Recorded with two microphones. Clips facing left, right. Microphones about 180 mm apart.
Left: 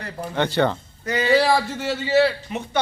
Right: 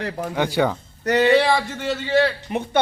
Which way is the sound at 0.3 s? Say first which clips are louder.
Left 1 dB; 10° right (ahead or behind).